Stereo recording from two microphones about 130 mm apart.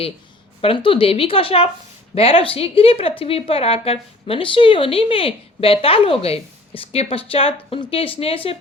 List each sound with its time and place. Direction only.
0.6 s a woman's voice: 45° left (ahead or behind)